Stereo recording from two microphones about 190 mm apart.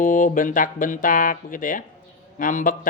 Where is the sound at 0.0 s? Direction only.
45° left (ahead or behind).